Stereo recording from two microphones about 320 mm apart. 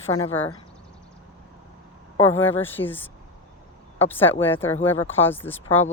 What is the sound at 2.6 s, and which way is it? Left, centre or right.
Speech, centre.